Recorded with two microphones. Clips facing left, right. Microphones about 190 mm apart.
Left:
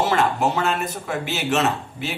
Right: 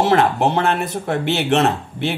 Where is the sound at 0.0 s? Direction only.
55° right (ahead or behind).